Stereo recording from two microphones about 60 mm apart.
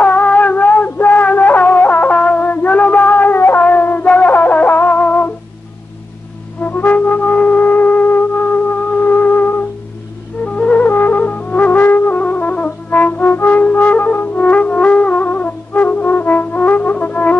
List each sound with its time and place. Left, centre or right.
0.0 s music: left
6.6 s music: left